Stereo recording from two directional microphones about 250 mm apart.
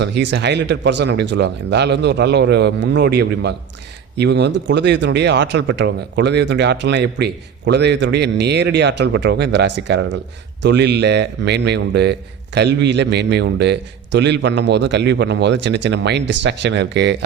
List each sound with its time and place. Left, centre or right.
0.0 s speech: right